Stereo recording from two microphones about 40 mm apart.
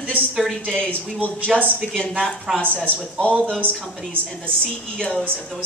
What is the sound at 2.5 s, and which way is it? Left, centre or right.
Speech, left.